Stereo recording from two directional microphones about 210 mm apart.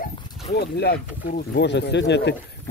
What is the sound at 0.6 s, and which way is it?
Speech, 50° left (ahead or behind).